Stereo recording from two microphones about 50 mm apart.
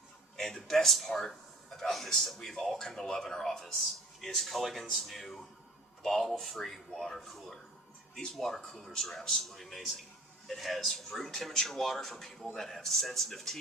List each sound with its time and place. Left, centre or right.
0.3 s speech: centre